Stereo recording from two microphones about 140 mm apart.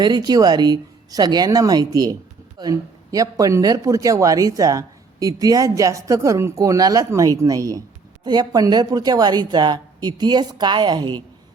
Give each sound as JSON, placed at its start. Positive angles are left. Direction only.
{"t": 0.0, "sound": "a woman's voice", "side_deg": -30}